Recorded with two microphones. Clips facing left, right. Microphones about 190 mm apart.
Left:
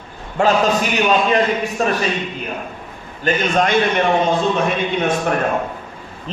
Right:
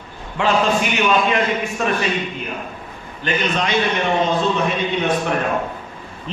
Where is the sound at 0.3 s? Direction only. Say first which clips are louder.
Left 2 dB; 40° left (ahead or behind).